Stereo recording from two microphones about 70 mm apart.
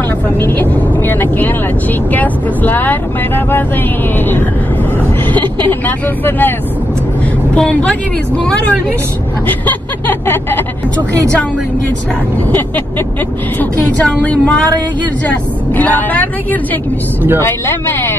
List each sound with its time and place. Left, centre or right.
0.4 s speech: left
5.3 s speech: left
7.5 s a woman's voice: centre
9.5 s speech: left
12.4 s speech: left
17.4 s speech: left